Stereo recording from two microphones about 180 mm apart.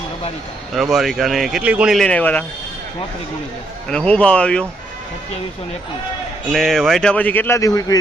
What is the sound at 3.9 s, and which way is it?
Speech, 5° left (ahead or behind).